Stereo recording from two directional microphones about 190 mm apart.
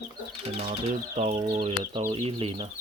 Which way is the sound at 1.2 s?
30° right (ahead or behind).